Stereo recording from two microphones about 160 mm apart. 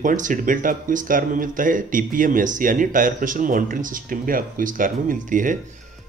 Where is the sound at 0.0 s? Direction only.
55° right (ahead or behind).